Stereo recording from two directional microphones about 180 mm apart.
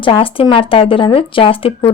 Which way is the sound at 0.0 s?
30° left (ahead or behind).